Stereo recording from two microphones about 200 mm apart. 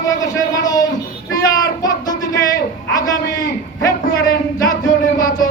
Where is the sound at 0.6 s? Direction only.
20° left (ahead or behind).